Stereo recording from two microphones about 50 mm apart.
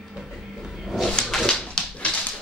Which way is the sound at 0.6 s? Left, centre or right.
Centre.